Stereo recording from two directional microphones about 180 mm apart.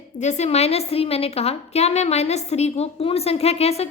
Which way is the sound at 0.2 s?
40° left (ahead or behind).